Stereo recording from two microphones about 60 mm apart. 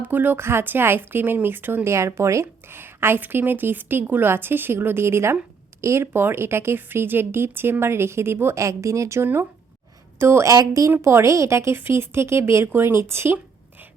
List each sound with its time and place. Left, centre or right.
0.0 s a woman's voice: right
1.9 s speech: right
2.7 s a woman's voice: right
8.6 s speech: right
9.2 s a woman's voice: right
10.5 s speech: right
11.0 s speech: right